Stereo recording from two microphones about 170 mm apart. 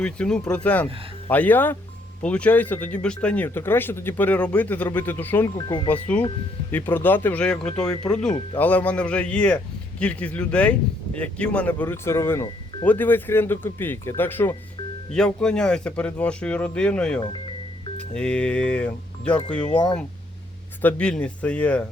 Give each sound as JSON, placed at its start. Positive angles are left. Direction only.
{"t": 0.0, "sound": "speech", "side_deg": 5}
{"t": 5.5, "sound": "speech", "side_deg": 25}
{"t": 5.9, "sound": "speech", "side_deg": 10}